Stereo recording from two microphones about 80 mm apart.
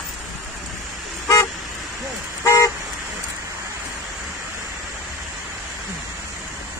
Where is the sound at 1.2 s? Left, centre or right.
Left.